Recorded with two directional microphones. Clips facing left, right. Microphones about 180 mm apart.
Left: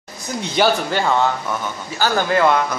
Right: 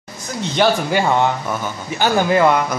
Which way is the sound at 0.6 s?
5° left (ahead or behind).